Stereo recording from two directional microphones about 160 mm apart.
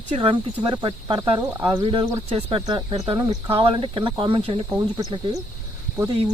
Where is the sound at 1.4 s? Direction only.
15° right (ahead or behind).